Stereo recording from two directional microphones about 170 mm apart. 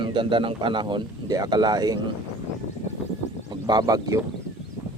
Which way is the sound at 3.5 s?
25° right (ahead or behind).